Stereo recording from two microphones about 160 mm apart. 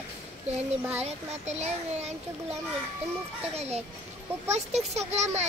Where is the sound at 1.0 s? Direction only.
45° right (ahead or behind).